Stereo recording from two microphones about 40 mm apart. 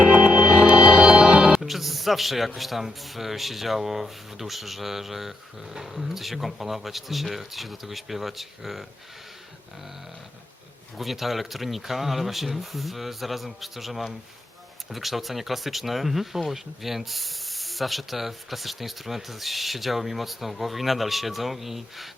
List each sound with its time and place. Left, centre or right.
0.0 s music: right
1.5 s music: centre
2.6 s speech: centre
10.9 s speech: centre